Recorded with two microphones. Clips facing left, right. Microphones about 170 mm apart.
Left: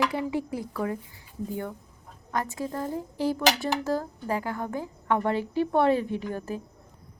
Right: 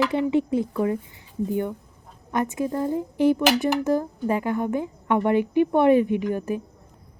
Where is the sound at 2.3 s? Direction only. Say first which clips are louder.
Right 6 dB; 20° right (ahead or behind).